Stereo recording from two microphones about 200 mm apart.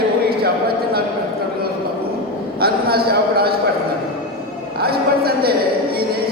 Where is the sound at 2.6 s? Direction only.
50° right (ahead or behind).